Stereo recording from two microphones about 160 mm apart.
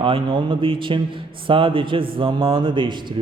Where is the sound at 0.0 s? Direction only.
30° right (ahead or behind).